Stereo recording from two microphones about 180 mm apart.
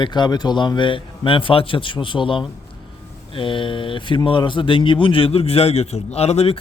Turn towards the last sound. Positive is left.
turn(degrees=35)  # may be behind; listen again after turning